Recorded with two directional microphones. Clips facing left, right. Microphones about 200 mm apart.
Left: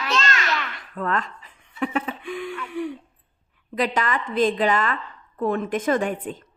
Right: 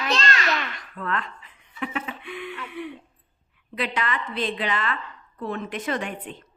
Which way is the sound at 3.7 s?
40° left (ahead or behind).